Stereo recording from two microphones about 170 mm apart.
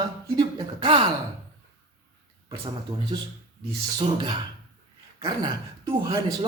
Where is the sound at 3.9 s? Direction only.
30° right (ahead or behind).